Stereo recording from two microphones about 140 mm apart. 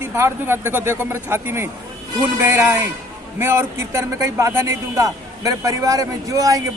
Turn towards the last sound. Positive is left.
turn(degrees=-25)  # may be behind; listen again after turning